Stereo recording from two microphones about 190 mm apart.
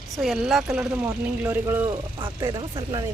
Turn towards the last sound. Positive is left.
turn(degrees=-25)  # may be behind; listen again after turning